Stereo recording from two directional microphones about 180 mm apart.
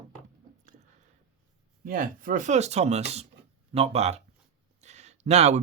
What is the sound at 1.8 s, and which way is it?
Speech, 50° right (ahead or behind).